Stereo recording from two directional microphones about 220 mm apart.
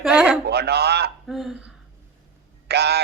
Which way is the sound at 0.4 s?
50° right (ahead or behind).